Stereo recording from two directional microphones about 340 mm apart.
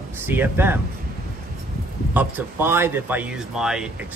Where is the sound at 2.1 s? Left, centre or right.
Centre.